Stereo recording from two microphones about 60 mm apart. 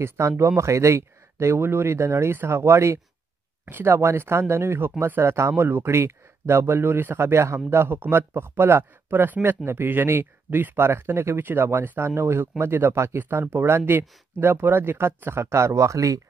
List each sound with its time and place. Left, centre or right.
0.0 s speech: right
1.6 s speech: right
10.8 s speech: right